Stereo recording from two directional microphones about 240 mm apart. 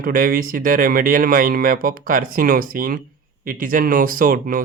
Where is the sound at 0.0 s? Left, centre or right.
Right.